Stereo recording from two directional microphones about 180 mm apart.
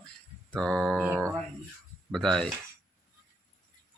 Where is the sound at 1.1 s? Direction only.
15° right (ahead or behind).